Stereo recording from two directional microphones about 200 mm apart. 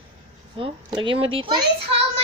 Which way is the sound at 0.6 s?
25° right (ahead or behind).